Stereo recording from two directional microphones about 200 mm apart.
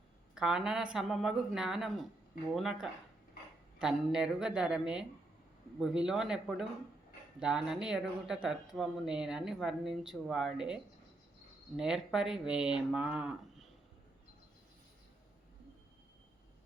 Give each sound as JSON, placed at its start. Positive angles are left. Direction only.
{"t": 0.3, "sound": "speech", "side_deg": -5}
{"t": 11.8, "sound": "speech", "side_deg": 0}